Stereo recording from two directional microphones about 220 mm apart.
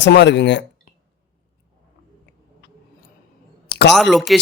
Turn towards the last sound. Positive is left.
turn(degrees=0)  # may be behind; listen again after turning